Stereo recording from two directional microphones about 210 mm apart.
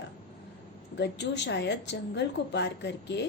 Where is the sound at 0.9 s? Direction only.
55° left (ahead or behind).